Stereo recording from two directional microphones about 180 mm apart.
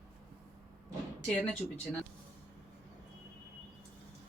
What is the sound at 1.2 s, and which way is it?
Speech, 5° left (ahead or behind).